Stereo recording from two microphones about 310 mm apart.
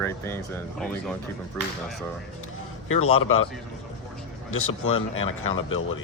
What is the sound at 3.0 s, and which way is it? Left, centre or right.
Speech, left.